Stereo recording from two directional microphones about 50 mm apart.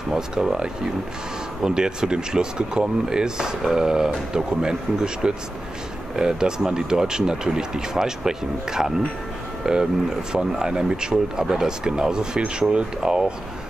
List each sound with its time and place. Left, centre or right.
0.1 s speech: centre